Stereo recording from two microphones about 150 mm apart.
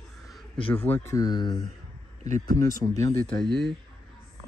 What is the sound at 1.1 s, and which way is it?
Speech, 25° left (ahead or behind).